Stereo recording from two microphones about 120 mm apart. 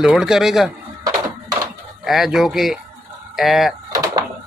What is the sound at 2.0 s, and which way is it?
Speech, centre (ahead or behind).